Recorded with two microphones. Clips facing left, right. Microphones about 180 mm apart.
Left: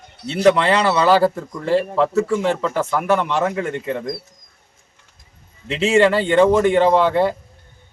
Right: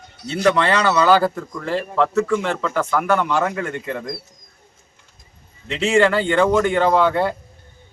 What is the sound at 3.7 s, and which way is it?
Speech, 25° left (ahead or behind).